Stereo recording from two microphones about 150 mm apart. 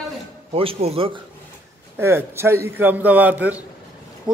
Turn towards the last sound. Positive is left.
turn(degrees=-10)  # may be behind; listen again after turning